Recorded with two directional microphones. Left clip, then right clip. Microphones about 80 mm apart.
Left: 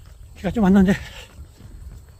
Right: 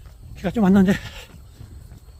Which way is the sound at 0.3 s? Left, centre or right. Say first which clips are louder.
Even; right.